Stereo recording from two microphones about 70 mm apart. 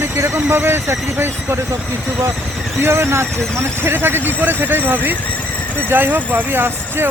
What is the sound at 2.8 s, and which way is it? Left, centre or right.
Speech, right.